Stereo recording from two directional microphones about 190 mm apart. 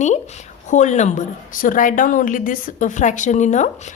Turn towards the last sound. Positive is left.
turn(degrees=40)  # may be behind; listen again after turning